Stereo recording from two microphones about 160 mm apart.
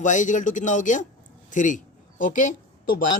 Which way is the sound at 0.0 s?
50° left (ahead or behind).